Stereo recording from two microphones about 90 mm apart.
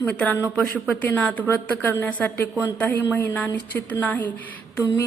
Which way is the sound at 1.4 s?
15° left (ahead or behind).